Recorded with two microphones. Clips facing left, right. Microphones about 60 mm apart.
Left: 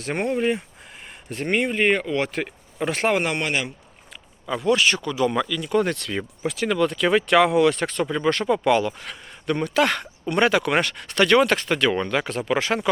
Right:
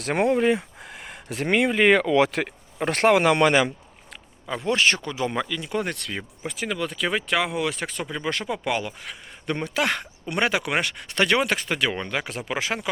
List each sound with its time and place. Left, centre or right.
0.0 s speech: right
2.8 s speech: right
4.6 s speech: right
5.8 s speech: centre
9.5 s speech: right